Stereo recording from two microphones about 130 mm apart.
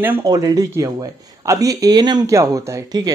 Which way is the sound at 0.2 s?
30° right (ahead or behind).